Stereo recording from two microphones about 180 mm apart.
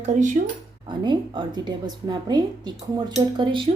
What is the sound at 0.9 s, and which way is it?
A woman's voice, 25° right (ahead or behind).